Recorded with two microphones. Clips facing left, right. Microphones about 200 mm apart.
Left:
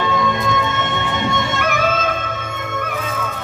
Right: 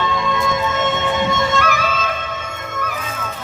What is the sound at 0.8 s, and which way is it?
Music, 60° left (ahead or behind).